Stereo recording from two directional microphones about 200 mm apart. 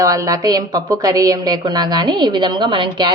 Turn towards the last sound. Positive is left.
turn(degrees=-25)  # may be behind; listen again after turning